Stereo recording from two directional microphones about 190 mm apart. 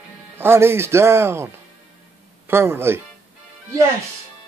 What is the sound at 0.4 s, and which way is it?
Speech, 10° right (ahead or behind).